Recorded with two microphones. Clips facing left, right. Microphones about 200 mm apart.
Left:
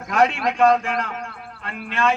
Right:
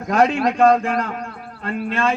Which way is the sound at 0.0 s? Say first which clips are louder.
Right 3 dB; 35° right (ahead or behind).